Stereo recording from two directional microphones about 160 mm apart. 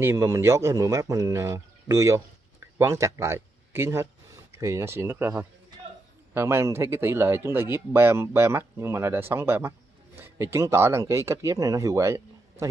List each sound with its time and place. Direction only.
0.0 s a man's voice: 15° right (ahead or behind)